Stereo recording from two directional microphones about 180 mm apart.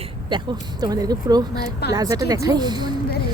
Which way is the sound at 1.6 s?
65° left (ahead or behind).